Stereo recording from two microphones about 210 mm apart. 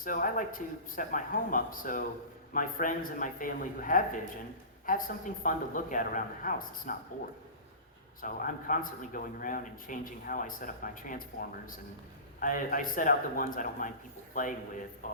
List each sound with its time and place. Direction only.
0.0 s a man's voice: 40° left (ahead or behind)
8.2 s a man's voice: 40° left (ahead or behind)